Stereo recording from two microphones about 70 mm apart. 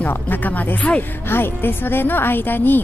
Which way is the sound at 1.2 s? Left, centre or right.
Left.